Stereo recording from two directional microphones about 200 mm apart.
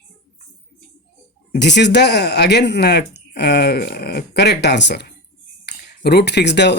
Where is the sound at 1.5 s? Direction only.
60° left (ahead or behind).